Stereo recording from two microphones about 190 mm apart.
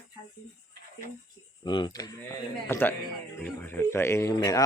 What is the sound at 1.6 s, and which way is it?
A man's voice, 25° left (ahead or behind).